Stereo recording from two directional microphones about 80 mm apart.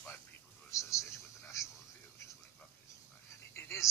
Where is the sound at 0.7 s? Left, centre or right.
Left.